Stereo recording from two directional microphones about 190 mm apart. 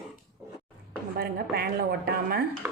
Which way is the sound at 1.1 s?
50° right (ahead or behind).